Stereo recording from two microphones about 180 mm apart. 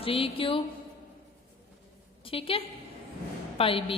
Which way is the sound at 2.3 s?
30° left (ahead or behind).